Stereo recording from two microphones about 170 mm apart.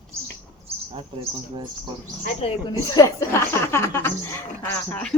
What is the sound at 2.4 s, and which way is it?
Speech, 35° left (ahead or behind).